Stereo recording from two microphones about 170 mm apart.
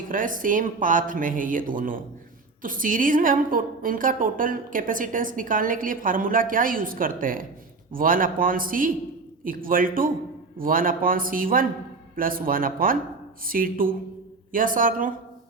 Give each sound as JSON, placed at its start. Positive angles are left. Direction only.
{"t": 0.1, "sound": "a woman's voice", "side_deg": -50}